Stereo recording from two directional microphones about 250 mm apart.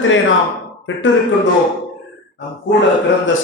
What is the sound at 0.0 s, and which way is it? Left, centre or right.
Speech, left.